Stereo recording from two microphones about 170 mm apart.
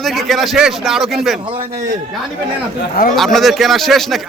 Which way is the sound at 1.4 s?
30° right (ahead or behind).